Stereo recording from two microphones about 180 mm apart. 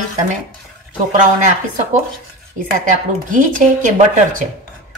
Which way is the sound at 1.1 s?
45° right (ahead or behind).